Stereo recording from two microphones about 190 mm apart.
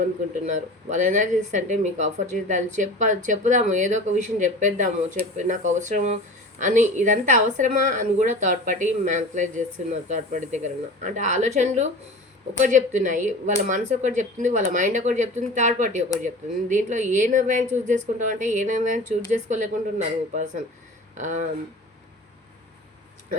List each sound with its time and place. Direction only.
0.9 s speech: 40° right (ahead or behind)